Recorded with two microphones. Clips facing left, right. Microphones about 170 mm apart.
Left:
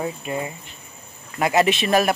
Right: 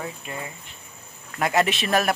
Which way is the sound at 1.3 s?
5° left (ahead or behind).